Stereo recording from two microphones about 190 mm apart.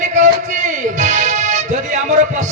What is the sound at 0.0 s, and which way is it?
Music, 40° right (ahead or behind).